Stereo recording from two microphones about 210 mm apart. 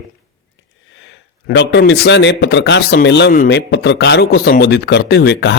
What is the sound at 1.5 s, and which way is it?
A man's voice, 55° left (ahead or behind).